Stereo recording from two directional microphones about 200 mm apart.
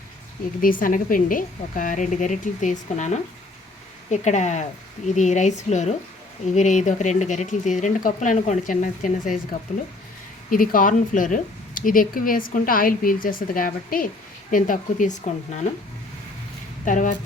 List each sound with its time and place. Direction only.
0.6 s speech: 45° left (ahead or behind)
10.5 s speech: 45° left (ahead or behind)
16.8 s speech: 40° left (ahead or behind)